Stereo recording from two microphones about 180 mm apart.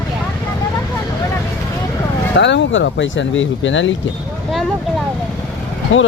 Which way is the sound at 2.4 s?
85° left.